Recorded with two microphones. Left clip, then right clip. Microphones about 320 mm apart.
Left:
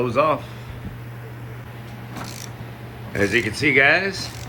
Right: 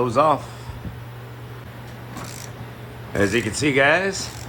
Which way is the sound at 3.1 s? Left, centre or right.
Centre.